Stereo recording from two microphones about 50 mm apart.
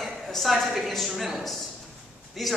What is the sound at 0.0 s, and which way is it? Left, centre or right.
A woman's voice, centre.